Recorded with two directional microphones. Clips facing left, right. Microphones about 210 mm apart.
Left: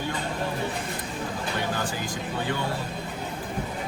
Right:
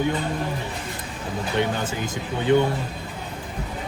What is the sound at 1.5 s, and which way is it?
Speech, 20° right (ahead or behind).